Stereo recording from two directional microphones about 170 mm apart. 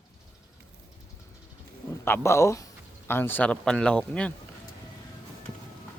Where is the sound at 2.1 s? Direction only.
15° left (ahead or behind).